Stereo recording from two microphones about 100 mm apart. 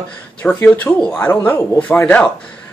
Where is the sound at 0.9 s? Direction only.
Centre (ahead or behind).